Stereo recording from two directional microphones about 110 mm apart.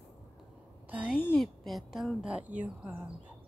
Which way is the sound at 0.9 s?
10° right (ahead or behind).